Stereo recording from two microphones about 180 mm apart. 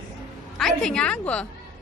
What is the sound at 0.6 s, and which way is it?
Speech, 5° left (ahead or behind).